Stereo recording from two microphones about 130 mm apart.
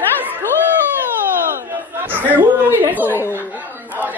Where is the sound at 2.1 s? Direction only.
15° right (ahead or behind).